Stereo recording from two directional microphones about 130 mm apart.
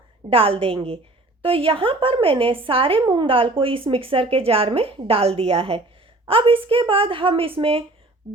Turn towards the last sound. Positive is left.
turn(degrees=-45)  # may be behind; listen again after turning